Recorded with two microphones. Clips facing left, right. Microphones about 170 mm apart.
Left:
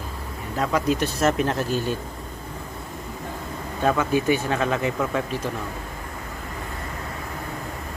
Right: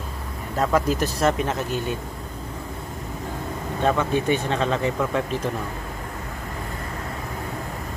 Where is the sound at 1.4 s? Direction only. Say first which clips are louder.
Left 2 dB; 20° right (ahead or behind).